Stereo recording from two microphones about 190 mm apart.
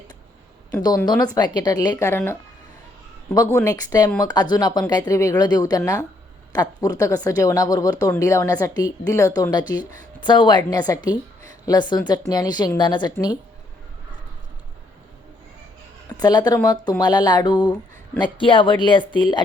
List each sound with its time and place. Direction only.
0.8 s a woman's voice: 20° left (ahead or behind)
16.2 s a woman's voice: 20° left (ahead or behind)